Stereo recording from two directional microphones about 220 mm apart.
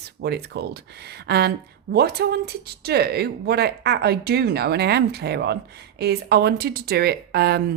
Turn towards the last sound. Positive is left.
turn(degrees=-45)  # may be behind; listen again after turning